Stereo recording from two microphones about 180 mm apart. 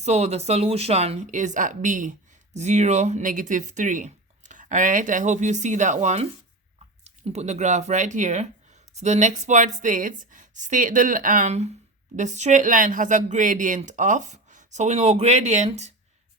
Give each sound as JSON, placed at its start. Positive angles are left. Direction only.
{"t": 0.0, "sound": "speech", "side_deg": -35}